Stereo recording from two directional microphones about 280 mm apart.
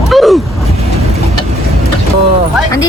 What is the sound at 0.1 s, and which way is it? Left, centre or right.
Vehicle, centre.